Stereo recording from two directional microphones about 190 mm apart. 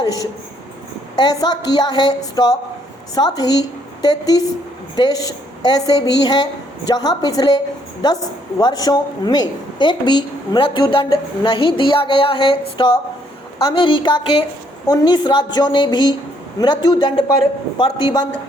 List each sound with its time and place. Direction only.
0.0 s a woman's voice: 20° left (ahead or behind)